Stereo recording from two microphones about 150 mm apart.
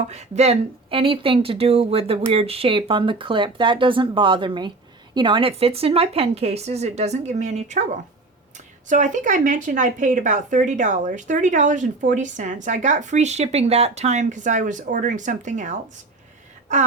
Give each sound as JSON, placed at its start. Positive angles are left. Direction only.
{"t": 0.1, "sound": "speech", "side_deg": -45}